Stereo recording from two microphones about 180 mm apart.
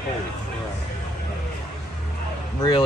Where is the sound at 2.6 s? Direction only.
25° left (ahead or behind).